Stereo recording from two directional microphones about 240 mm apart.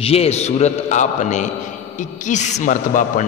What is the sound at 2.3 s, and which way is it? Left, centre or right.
Mantra, left.